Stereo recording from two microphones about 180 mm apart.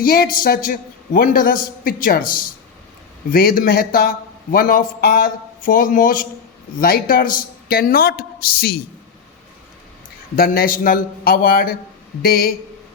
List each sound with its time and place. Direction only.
0.0 s a man's voice: 55° left (ahead or behind)
10.3 s a man's voice: 55° left (ahead or behind)